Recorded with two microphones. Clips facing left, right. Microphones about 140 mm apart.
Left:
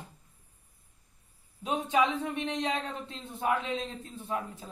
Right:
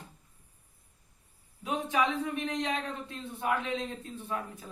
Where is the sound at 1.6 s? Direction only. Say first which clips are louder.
Left 2 dB; 25° left (ahead or behind).